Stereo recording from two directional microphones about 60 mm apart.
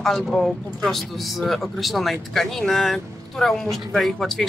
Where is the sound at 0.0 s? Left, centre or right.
Centre.